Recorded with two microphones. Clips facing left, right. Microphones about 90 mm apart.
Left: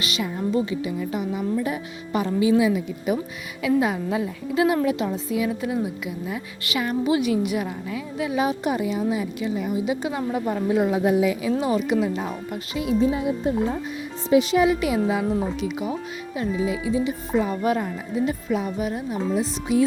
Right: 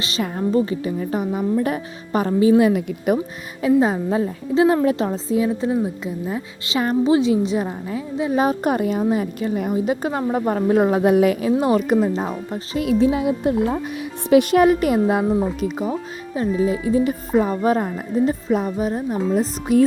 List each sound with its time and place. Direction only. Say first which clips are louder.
0.2 s a woman's voice: right 5 dB; 40° right (ahead or behind)
3.8 s a woman's voice: right 4 dB; 35° right (ahead or behind); by 11.5 s 55° right (ahead or behind)
11.9 s a woman's voice: right 4 dB; 40° right (ahead or behind)
12.8 s a woman's voice: right 4 dB; 70° right (ahead or behind); by 15.3 s 50° right (ahead or behind)
15.6 s a woman's voice: right 4 dB; 35° right (ahead or behind)
19.3 s a woman's voice: right 4 dB; 50° right (ahead or behind)